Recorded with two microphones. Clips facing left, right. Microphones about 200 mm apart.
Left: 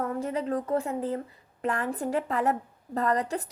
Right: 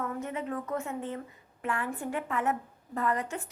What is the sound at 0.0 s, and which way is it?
A woman's voice, 35° left (ahead or behind).